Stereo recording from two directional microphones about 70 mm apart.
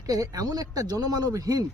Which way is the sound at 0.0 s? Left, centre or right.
Right.